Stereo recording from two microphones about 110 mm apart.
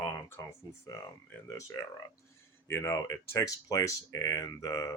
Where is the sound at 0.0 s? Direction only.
20° left (ahead or behind).